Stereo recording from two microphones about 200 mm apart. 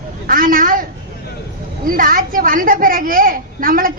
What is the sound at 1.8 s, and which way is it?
A woman's voice, 45° right (ahead or behind).